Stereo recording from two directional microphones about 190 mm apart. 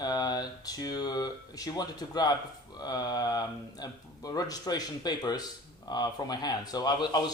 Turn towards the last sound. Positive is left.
turn(degrees=20)  # may be behind; listen again after turning